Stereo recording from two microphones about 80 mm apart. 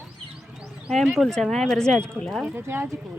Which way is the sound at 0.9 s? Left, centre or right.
Centre.